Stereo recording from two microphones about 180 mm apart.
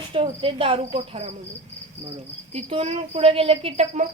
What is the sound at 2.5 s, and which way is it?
Speech, 35° right (ahead or behind).